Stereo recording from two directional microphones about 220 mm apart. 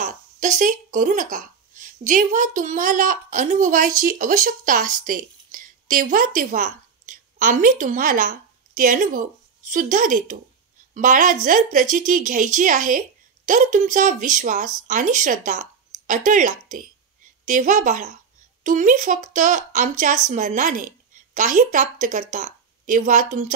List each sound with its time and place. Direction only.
0.0 s speech: 35° right (ahead or behind)